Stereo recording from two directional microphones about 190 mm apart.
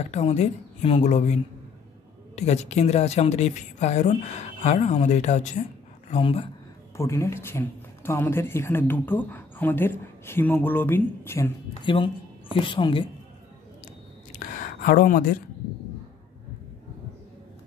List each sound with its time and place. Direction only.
0.1 s a woman's voice: 35° left (ahead or behind)
7.0 s speech: 15° left (ahead or behind)
11.8 s speech: 25° left (ahead or behind)
14.4 s a sound: 50° left (ahead or behind)